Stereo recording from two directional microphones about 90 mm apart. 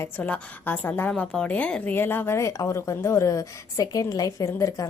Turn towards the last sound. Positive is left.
turn(degrees=40)  # may be behind; listen again after turning